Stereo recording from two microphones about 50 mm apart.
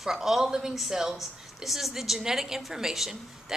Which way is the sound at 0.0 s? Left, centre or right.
Centre.